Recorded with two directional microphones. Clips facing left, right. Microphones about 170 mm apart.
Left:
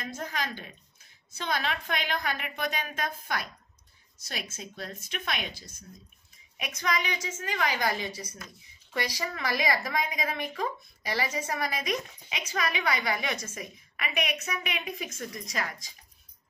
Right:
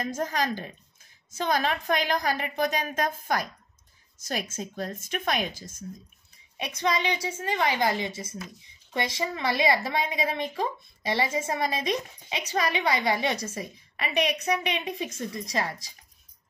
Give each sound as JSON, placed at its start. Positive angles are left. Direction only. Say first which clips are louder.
{"t": 0.0, "sound": "a woman's voice", "louder": "right 7 dB", "side_deg": -45}
{"t": 6.5, "sound": "a woman's voice", "louder": "right 4 dB", "side_deg": -30}